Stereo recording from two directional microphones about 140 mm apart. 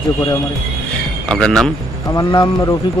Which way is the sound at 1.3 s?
5° left (ahead or behind).